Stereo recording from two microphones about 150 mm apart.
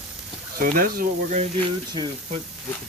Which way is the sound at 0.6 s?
70° right (ahead or behind).